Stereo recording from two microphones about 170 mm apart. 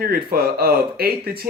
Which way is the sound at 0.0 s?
65° right (ahead or behind).